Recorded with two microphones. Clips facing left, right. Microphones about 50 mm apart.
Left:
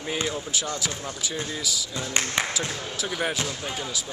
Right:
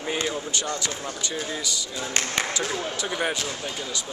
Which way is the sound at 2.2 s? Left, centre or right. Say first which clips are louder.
Even; centre.